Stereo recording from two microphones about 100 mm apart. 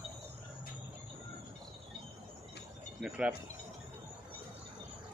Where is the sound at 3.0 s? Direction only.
5° right (ahead or behind).